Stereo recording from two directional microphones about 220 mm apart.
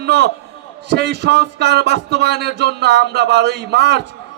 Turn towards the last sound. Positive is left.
turn(degrees=-50)  # may be behind; listen again after turning